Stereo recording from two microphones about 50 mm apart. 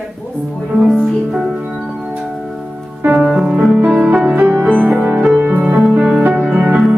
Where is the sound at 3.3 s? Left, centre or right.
Centre.